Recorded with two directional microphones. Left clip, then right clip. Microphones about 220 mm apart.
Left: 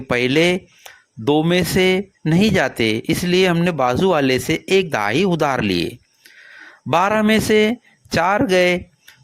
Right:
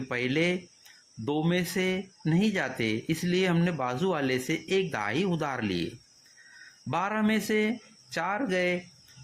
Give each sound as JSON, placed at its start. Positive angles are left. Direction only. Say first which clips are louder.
{"t": 0.1, "sound": "speech", "louder": "left 12 dB", "side_deg": 45}
{"t": 6.9, "sound": "speech", "louder": "left 13 dB", "side_deg": 45}